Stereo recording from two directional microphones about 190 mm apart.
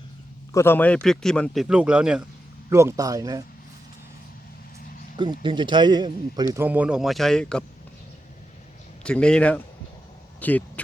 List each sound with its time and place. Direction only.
0.5 s speech: 10° left (ahead or behind); by 3.4 s 20° right (ahead or behind)
5.1 s a man's voice: 25° right (ahead or behind); by 7.6 s 5° left (ahead or behind)
9.0 s speech: 5° left (ahead or behind)